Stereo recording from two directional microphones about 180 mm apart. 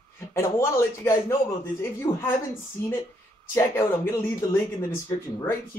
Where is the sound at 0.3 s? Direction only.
15° left (ahead or behind).